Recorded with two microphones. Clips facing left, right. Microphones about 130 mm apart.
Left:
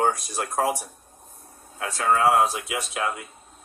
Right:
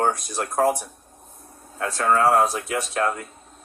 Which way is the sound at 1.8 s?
40° right (ahead or behind).